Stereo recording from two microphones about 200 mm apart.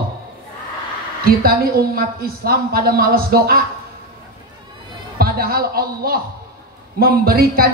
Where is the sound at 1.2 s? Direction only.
50° right (ahead or behind).